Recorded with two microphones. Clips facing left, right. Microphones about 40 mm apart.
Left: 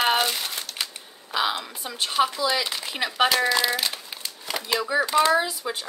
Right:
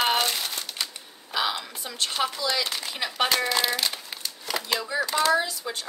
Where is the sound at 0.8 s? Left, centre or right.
Left.